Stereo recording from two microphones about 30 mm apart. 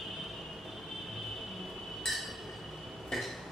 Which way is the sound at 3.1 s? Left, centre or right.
Centre.